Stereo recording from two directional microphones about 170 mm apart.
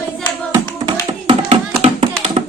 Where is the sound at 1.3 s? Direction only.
40° right (ahead or behind).